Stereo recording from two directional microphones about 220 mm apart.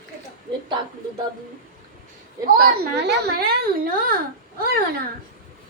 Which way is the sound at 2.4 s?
45° right (ahead or behind).